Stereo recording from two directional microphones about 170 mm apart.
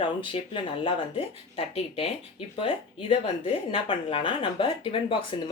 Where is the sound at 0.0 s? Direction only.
30° left (ahead or behind).